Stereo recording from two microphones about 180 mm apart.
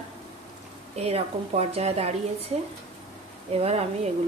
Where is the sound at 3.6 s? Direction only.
35° right (ahead or behind).